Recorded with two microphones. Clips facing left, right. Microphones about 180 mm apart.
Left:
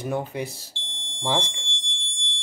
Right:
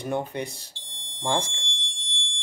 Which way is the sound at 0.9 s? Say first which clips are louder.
Left 4 dB; 40° right (ahead or behind).